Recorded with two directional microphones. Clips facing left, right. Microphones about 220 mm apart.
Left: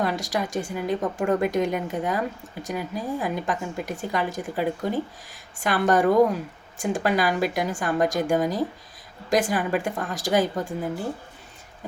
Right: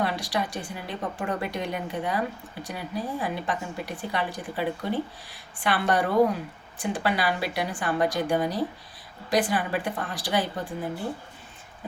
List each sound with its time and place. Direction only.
0.0 s a woman's voice: 45° left (ahead or behind)